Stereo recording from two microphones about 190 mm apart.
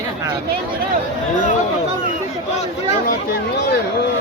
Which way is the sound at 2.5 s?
35° left (ahead or behind).